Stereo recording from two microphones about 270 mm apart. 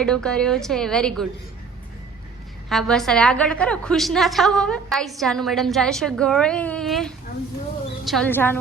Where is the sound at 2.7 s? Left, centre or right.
Centre.